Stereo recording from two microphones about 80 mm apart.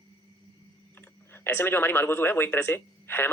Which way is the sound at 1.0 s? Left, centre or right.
Left.